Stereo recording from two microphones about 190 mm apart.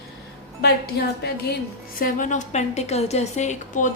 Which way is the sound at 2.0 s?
40° left (ahead or behind).